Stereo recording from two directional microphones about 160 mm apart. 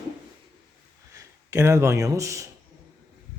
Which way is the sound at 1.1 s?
20° right (ahead or behind).